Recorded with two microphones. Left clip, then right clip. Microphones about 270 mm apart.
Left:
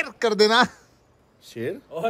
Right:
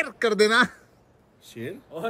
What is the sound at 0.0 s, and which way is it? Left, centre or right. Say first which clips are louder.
Speech: left 1 dB; centre.